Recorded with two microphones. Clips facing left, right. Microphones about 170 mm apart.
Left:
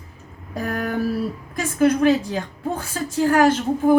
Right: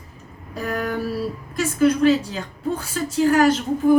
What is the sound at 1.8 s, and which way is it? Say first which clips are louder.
A woman's voice: even; 55° left (ahead or behind).